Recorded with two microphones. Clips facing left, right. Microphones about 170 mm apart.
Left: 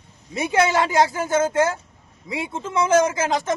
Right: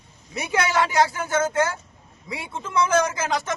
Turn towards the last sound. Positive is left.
turn(degrees=25)  # may be behind; listen again after turning